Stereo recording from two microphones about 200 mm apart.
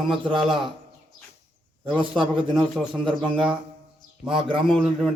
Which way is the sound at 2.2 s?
25° right (ahead or behind).